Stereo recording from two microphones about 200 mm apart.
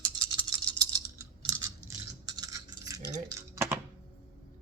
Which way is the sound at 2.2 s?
20° right (ahead or behind).